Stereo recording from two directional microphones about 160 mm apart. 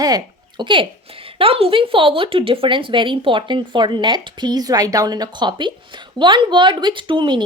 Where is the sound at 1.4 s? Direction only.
35° right (ahead or behind).